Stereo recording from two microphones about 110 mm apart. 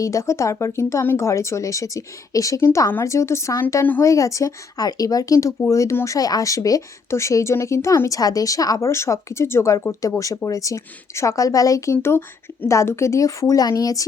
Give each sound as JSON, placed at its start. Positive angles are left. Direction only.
{"t": 0.0, "sound": "speech", "side_deg": 30}